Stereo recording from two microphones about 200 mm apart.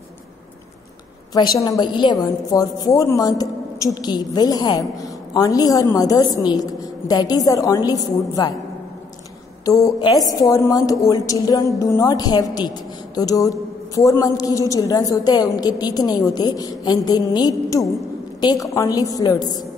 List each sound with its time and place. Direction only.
1.3 s a woman's voice: 20° left (ahead or behind)
9.7 s a woman's voice: 15° left (ahead or behind)